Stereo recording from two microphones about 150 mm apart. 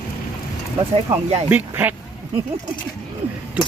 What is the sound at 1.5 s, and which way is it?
Speech, 10° right (ahead or behind).